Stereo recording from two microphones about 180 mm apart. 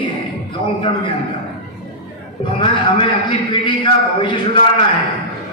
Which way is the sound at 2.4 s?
25° left (ahead or behind).